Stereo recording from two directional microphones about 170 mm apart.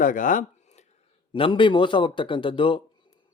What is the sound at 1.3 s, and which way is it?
Speech, 30° left (ahead or behind).